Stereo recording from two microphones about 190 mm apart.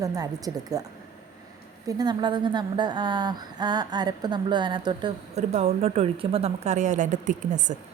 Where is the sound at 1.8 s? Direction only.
20° right (ahead or behind); by 7.7 s 40° right (ahead or behind).